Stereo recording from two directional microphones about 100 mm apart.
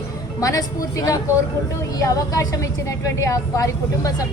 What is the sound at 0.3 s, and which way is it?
Speech, 35° left (ahead or behind).